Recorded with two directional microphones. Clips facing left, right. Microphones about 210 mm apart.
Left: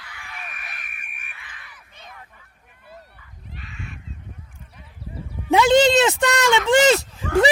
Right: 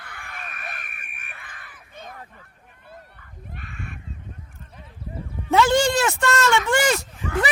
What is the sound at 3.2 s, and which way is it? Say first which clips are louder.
Crow: right 1 dB; 55° right (ahead or behind).